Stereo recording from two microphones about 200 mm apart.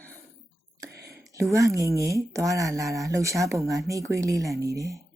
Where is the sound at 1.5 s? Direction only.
15° right (ahead or behind).